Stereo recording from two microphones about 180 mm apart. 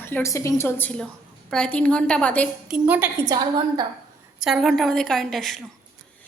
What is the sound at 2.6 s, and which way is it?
Speech, 5° right (ahead or behind).